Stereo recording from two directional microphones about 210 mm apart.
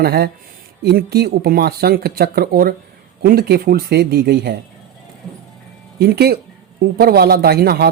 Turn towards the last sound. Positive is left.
turn(degrees=-50)  # may be behind; listen again after turning